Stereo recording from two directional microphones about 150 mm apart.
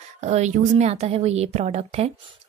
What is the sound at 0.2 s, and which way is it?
A woman's voice, 50° right (ahead or behind).